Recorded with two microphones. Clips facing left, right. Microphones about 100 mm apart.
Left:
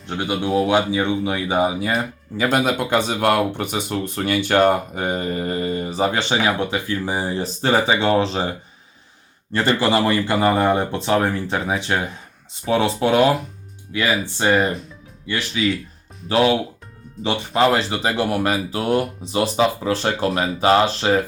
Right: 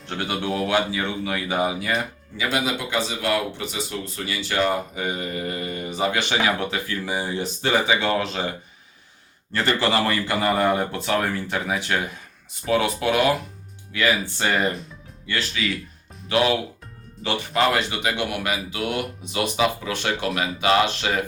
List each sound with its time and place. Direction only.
0.2 s speech: 20° left (ahead or behind)
2.4 s speech: 45° left (ahead or behind)